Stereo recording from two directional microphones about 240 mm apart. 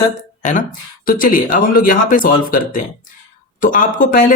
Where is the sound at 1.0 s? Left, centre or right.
Left.